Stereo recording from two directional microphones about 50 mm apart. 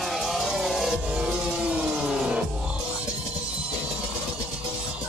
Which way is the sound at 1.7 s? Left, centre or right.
Centre.